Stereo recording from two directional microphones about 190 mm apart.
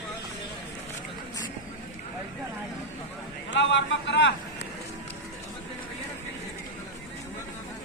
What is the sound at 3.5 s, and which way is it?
Speech, 75° left (ahead or behind).